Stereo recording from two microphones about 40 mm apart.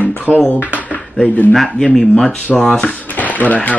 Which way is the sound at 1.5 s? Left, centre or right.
Centre.